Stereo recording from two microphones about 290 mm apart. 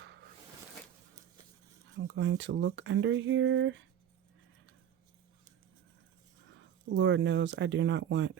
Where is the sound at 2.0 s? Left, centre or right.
Right.